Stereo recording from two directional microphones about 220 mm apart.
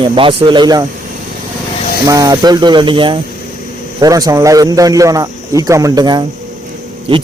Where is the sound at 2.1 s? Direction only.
15° right (ahead or behind).